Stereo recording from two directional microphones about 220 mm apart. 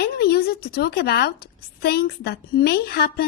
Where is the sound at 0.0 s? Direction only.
45° left (ahead or behind).